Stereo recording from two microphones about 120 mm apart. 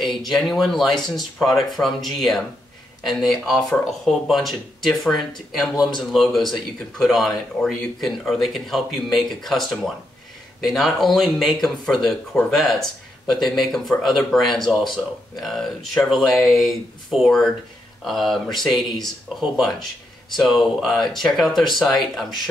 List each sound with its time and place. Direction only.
0.0 s speech: centre (ahead or behind)
5.8 s a man's voice: 40° left (ahead or behind)
6.1 s speech: centre (ahead or behind)